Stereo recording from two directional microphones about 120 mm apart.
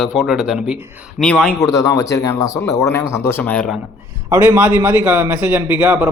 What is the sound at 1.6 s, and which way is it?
Speech, 30° left (ahead or behind).